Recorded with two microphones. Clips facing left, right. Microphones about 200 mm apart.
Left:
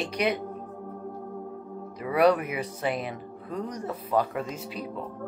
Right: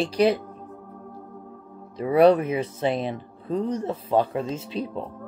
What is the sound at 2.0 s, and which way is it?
Speech, 30° right (ahead or behind).